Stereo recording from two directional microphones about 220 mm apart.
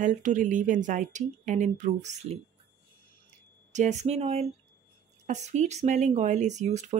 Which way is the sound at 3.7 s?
30° right (ahead or behind).